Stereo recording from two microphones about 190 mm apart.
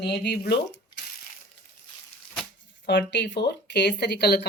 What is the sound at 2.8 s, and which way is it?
Speech, 65° left (ahead or behind).